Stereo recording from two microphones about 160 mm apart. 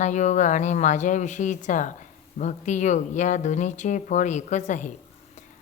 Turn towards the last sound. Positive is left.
turn(degrees=50)  # may be behind; listen again after turning